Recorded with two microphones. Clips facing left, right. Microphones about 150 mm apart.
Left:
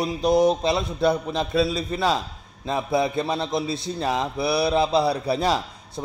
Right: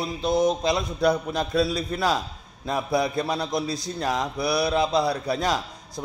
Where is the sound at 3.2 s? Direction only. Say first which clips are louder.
Left 1 dB; 25° left (ahead or behind).